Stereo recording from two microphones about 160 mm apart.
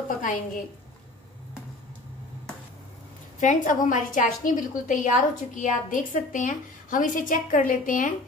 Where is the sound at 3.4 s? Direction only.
50° left (ahead or behind).